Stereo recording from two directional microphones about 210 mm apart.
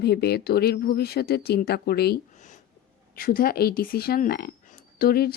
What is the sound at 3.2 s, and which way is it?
Speech, 45° left (ahead or behind).